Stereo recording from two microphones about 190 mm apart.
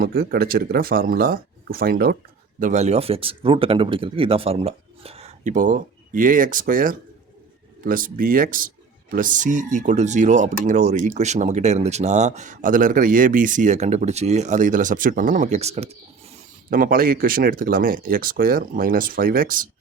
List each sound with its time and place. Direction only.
0.0 s speech: 50° right (ahead or behind)
2.6 s speech: 40° right (ahead or behind)
16.6 s speech: 50° right (ahead or behind)